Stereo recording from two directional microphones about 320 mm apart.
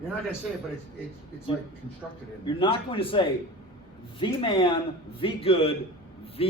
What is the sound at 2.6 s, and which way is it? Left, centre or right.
A man's voice, centre.